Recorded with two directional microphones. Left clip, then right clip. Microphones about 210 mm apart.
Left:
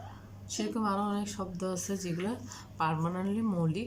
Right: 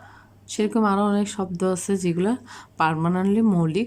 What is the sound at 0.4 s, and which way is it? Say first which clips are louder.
Speech: right 11 dB; 50° right (ahead or behind).